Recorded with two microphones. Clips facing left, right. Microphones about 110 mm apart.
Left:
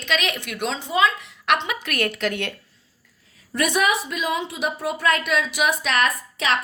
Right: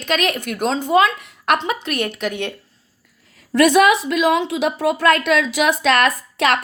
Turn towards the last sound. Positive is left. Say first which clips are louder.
# right 5 dB
turn(degrees=-65)  # may be behind; listen again after turning